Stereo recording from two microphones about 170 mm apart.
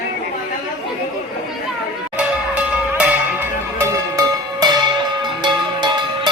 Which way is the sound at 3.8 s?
20° right (ahead or behind).